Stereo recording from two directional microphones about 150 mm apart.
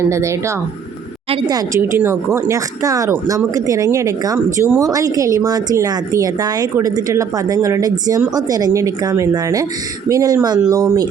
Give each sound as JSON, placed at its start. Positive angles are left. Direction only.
{"t": 0.0, "sound": "a woman's voice", "side_deg": -20}